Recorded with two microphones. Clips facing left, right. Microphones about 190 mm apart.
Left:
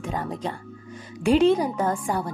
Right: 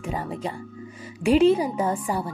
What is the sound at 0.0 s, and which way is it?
A woman's voice, 5° right (ahead or behind).